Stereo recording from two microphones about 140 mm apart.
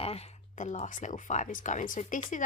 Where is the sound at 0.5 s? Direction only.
60° left (ahead or behind).